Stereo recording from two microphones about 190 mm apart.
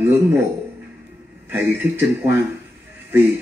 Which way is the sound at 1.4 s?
10° right (ahead or behind).